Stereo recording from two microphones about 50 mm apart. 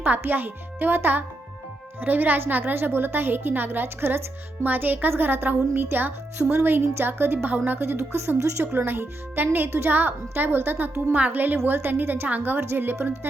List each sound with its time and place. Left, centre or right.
0.2 s a woman's voice: right
7.5 s a woman's voice: right
7.8 s a woman's voice: right
8.6 s a woman's voice: right